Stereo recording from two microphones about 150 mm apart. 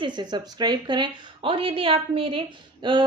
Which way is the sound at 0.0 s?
30° right (ahead or behind).